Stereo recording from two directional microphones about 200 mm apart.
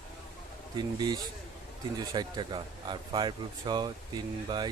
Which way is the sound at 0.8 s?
20° right (ahead or behind).